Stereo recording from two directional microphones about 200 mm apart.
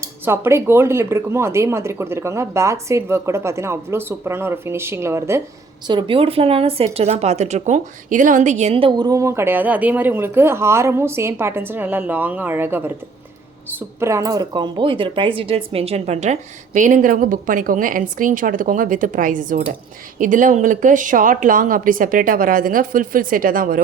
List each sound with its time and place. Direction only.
0.0 s speech: 10° right (ahead or behind)
5.9 s speech: 25° right (ahead or behind); by 23.8 s 45° right (ahead or behind)